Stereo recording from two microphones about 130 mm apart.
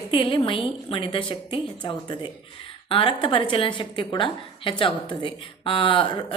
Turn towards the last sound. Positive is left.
turn(degrees=40)  # may be behind; listen again after turning